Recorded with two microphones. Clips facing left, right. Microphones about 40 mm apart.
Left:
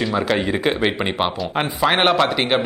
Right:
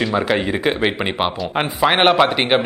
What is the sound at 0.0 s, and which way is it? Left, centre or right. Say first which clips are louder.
Speech: right 1 dB; centre.